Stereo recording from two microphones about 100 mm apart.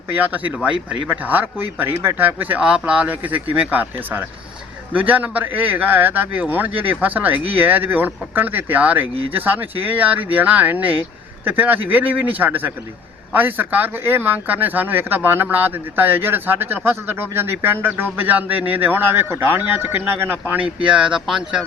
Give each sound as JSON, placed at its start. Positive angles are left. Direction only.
{"t": 0.1, "sound": "a man's voice", "side_deg": -20}